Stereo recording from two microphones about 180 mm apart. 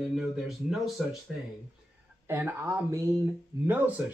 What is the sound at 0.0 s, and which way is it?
Speech, 5° right (ahead or behind).